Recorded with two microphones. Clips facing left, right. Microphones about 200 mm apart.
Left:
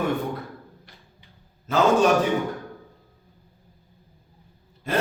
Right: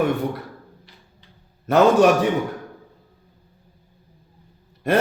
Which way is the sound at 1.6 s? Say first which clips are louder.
Right 5 dB; 65° right (ahead or behind).